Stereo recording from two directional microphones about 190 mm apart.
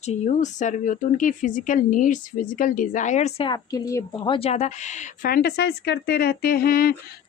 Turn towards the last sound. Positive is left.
turn(degrees=50)  # may be behind; listen again after turning